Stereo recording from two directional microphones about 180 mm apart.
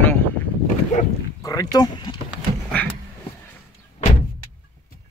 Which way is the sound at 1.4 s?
20° left (ahead or behind).